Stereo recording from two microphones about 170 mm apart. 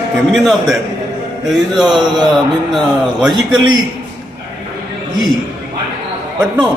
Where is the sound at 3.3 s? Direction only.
25° right (ahead or behind).